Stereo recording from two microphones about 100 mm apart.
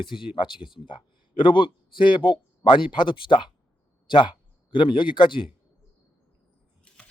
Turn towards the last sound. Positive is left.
turn(degrees=10)  # may be behind; listen again after turning